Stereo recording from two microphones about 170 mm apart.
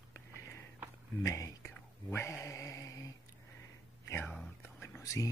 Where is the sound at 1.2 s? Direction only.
20° left (ahead or behind).